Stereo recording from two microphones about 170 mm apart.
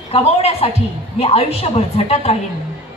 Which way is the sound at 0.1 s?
35° left (ahead or behind).